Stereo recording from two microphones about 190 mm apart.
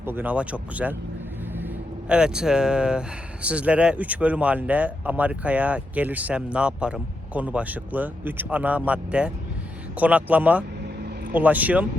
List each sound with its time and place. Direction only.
0.0 s speech: 10° right (ahead or behind)
2.0 s speech: 5° right (ahead or behind)